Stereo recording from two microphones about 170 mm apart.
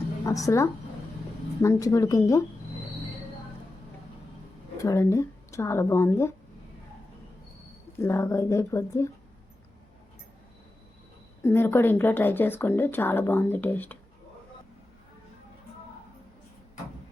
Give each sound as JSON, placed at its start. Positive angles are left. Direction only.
{"t": 0.3, "sound": "speech", "side_deg": 20}
{"t": 4.8, "sound": "speech", "side_deg": 20}
{"t": 7.9, "sound": "speech", "side_deg": 15}
{"t": 11.4, "sound": "speech", "side_deg": 15}